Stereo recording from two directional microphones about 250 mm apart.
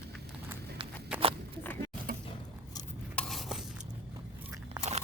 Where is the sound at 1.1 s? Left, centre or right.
Centre.